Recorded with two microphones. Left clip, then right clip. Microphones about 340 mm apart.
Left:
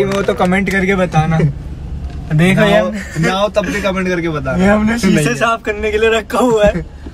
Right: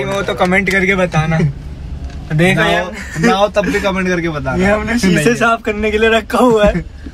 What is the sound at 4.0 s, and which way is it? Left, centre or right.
Speech, centre.